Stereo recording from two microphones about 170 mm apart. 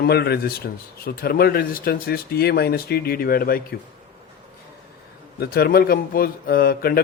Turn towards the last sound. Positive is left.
turn(degrees=60)  # may be behind; listen again after turning